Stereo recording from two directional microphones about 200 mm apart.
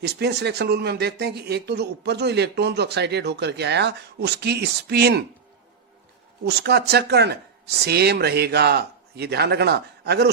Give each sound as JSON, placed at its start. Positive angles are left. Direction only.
{"t": 0.0, "sound": "speech", "side_deg": -55}
{"t": 6.4, "sound": "speech", "side_deg": -55}